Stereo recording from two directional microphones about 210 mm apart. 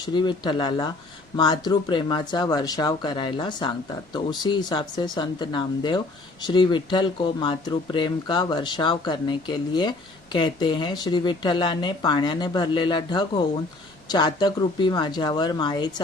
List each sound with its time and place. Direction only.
0.0 s speech: 20° left (ahead or behind)